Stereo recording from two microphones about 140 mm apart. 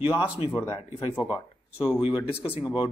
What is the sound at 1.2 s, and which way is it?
Speech, 10° right (ahead or behind).